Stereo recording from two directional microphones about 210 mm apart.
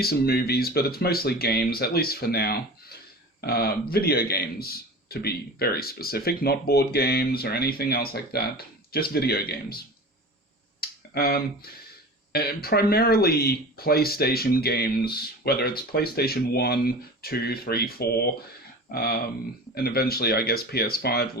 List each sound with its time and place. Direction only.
0.0 s speech: 50° left (ahead or behind)
10.8 s a sound: 50° left (ahead or behind)
12.3 s speech: 45° left (ahead or behind)